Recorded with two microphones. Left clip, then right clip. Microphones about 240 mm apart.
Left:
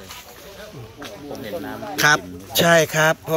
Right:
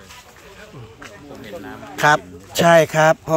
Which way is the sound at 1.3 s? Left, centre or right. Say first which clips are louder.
Left 4 dB; left.